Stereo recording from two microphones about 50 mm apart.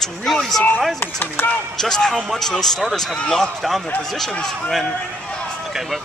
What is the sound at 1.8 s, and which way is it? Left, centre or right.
Speech, centre.